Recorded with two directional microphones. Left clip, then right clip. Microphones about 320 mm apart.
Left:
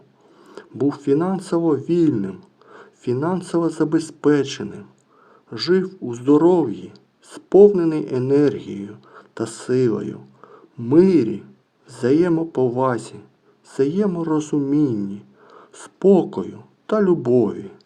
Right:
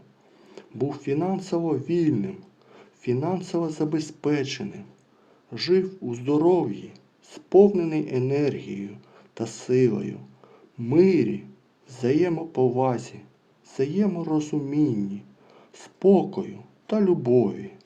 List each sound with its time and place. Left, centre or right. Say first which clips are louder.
0.4 s speech: left 7 dB; left
5.8 s a man's voice: left 6 dB; left